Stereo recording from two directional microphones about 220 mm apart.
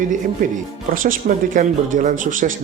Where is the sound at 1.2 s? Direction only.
35° right (ahead or behind).